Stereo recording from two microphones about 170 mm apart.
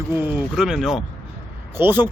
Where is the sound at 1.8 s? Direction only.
15° right (ahead or behind).